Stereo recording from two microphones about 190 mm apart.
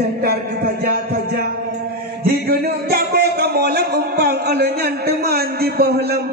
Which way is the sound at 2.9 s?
55° right (ahead or behind).